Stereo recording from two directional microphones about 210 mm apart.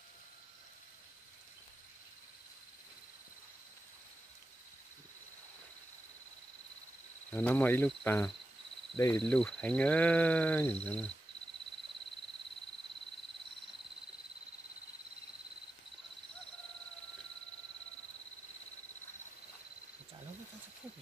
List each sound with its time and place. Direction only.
7.2 s speech: 5° left (ahead or behind)
9.2 s speech: 5° left (ahead or behind)